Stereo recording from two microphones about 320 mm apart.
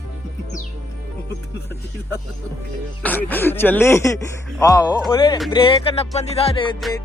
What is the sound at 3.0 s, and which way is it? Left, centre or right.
Speech, centre.